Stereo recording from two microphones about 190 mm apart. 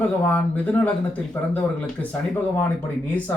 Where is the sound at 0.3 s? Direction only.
5° left (ahead or behind).